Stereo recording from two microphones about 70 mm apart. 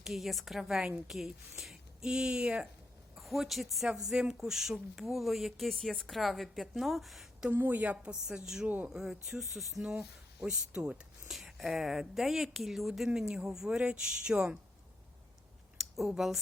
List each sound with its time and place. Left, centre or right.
0.0 s speech: centre
3.2 s speech: centre
7.5 s a woman's voice: right
8.3 s speech: centre
8.6 s a woman's voice: right
8.9 s speech: centre
15.8 s speech: centre